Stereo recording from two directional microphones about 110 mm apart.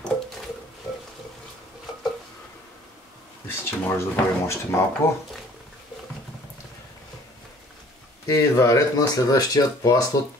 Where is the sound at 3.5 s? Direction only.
20° left (ahead or behind).